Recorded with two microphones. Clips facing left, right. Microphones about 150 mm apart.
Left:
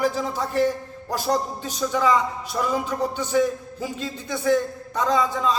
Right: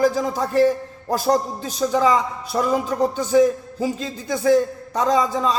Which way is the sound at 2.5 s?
55° right (ahead or behind).